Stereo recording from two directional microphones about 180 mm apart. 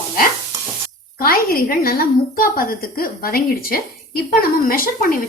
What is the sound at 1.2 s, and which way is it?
A woman's voice, 55° left (ahead or behind).